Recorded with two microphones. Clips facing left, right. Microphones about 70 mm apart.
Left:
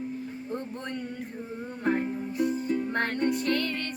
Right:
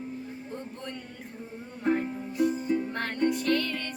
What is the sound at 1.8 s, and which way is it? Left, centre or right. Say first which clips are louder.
Music: even; centre.